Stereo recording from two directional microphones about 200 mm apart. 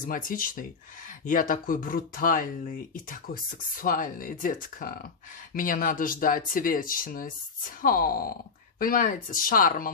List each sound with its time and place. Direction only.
0.0 s speech: 45° left (ahead or behind)